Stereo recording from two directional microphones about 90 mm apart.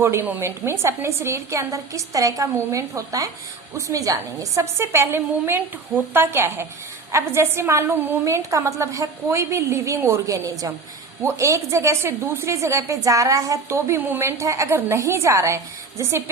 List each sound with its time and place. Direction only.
0.0 s a woman's voice: 25° right (ahead or behind)